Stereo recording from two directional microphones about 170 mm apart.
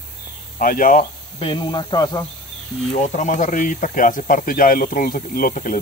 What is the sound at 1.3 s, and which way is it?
Speech, 30° left (ahead or behind).